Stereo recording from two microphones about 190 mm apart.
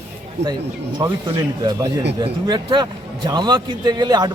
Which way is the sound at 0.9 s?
20° right (ahead or behind).